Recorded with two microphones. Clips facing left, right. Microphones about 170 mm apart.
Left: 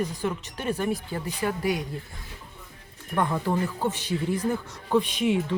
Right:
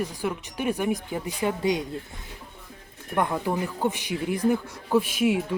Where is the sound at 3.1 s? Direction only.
10° right (ahead or behind).